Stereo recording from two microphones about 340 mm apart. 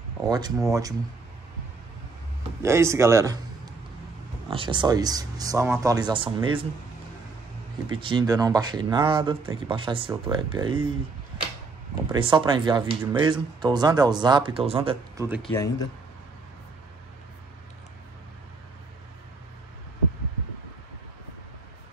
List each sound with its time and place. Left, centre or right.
0.3 s speech: centre
2.6 s a man's voice: centre
7.9 s speech: centre
12.1 s speech: centre
15.4 s speech: centre